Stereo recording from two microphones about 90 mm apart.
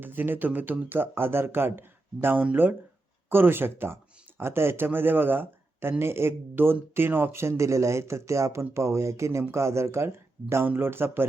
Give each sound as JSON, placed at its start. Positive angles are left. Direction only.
{"t": 0.0, "sound": "speech", "side_deg": -20}